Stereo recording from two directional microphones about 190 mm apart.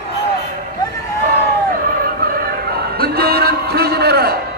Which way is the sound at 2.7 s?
55° right (ahead or behind).